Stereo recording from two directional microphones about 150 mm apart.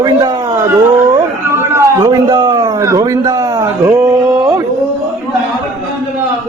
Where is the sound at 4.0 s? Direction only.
10° right (ahead or behind).